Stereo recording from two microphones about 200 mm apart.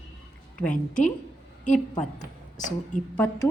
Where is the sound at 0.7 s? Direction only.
40° left (ahead or behind).